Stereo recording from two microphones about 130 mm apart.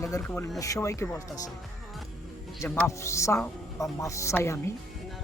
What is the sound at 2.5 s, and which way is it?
Speech, 15° left (ahead or behind).